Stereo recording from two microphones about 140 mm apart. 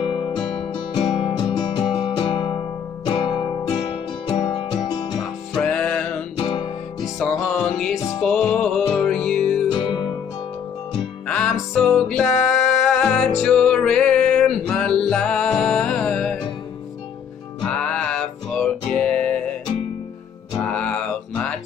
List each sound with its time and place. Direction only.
0.0 s music: 40° left (ahead or behind)
5.6 s music: 5° left (ahead or behind)
6.3 s music: 35° left (ahead or behind)
7.2 s music: 5° left (ahead or behind)
9.7 s music: 35° left (ahead or behind)
11.2 s music: 5° left (ahead or behind)
17.9 s music: 5° left (ahead or behind)
20.7 s music: 5° left (ahead or behind)